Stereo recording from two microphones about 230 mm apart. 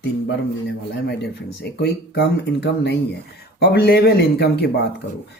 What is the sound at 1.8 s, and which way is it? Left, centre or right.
Speech, left.